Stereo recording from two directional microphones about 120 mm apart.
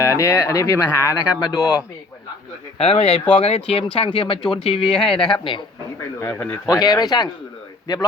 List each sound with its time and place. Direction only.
0.0 s speech: 25° left (ahead or behind)
2.7 s speech: 55° left (ahead or behind)
4.9 s speech: 5° left (ahead or behind)
5.4 s speech: 45° left (ahead or behind)
6.1 s speech: 20° left (ahead or behind)